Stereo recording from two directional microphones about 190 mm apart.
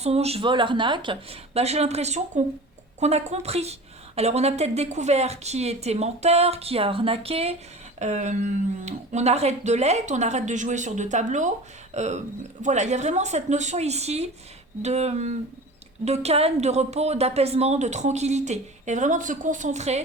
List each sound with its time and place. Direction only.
0.0 s a woman's voice: 35° right (ahead or behind)